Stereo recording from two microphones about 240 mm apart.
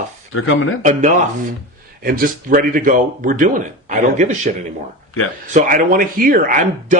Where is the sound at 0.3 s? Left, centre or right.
Left.